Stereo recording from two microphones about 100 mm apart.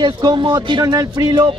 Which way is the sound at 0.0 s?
50° right (ahead or behind).